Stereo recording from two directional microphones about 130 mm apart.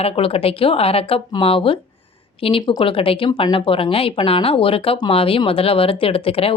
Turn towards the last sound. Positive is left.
turn(degrees=45)  # may be behind; listen again after turning